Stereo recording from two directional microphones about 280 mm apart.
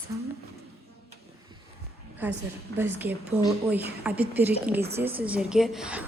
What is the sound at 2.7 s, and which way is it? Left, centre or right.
Speech, centre.